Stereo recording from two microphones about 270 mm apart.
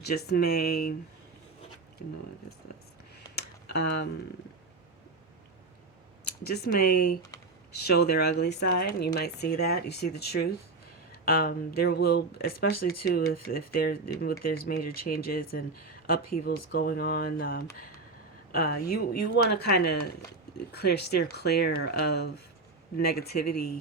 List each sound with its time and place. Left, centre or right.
0.0 s speech: left
3.3 s a sound: left
6.4 s speech: left